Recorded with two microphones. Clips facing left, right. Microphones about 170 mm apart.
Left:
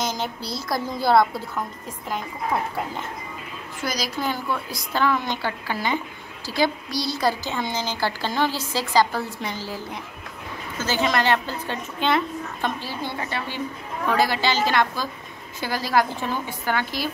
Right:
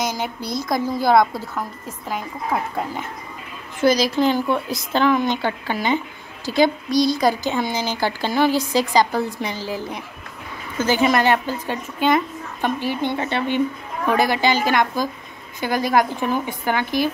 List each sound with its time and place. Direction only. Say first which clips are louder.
0.0 s a woman's voice: right 3 dB; 10° right (ahead or behind)
3.8 s a woman's voice: right 10 dB; 25° right (ahead or behind)
10.9 s a woman's voice: right 4 dB; 15° right (ahead or behind)